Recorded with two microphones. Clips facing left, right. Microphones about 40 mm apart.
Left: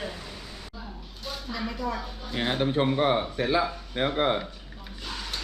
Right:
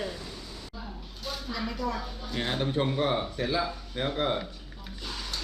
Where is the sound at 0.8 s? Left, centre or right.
Centre.